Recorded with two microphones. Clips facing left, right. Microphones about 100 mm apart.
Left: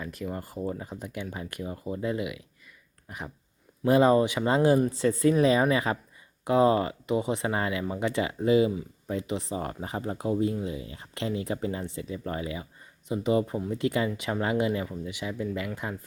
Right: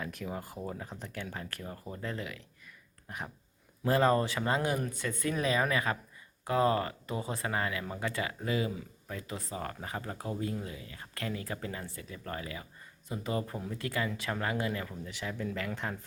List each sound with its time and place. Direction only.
0.0 s speech: centre (ahead or behind)
3.1 s a sound: centre (ahead or behind)
3.8 s speech: 15° left (ahead or behind)